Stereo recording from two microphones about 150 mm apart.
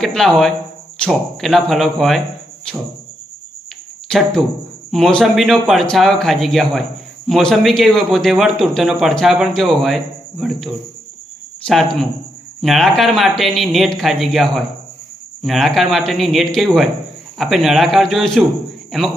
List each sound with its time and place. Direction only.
0.0 s speech: 5° left (ahead or behind)
2.7 s music: 5° left (ahead or behind)
4.1 s a man's voice: 5° left (ahead or behind)